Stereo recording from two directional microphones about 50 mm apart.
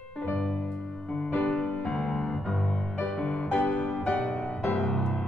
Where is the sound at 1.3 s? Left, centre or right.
Left.